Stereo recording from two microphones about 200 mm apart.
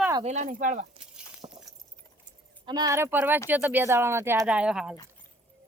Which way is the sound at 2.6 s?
20° right (ahead or behind).